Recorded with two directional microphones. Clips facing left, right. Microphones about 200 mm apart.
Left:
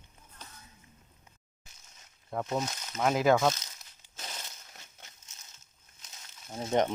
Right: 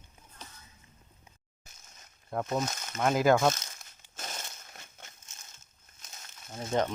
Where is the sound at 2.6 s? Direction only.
50° right (ahead or behind).